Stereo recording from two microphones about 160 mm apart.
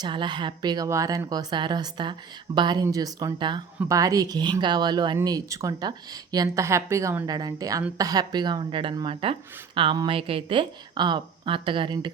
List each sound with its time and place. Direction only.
0.0 s a woman's voice: 30° right (ahead or behind)